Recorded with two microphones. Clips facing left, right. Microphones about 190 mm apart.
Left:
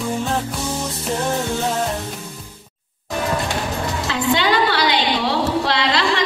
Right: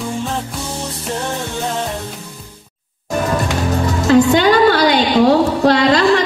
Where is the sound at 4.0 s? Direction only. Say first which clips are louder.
Right 10 dB; 45° right (ahead or behind).